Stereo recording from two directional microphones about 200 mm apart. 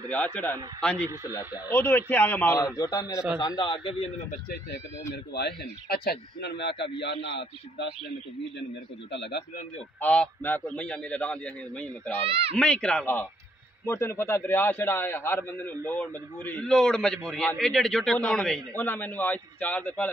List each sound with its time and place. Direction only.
0.1 s a man's voice: 10° left (ahead or behind)
1.7 s a man's voice: 10° left (ahead or behind)
5.1 s speech: 55° left (ahead or behind)
9.1 s speech: 60° left (ahead or behind)
9.9 s a man's voice: 5° left (ahead or behind)
12.3 s speech: 30° right (ahead or behind)
12.5 s a man's voice: 5° left (ahead or behind)